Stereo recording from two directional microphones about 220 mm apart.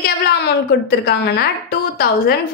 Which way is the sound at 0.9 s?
45° left (ahead or behind).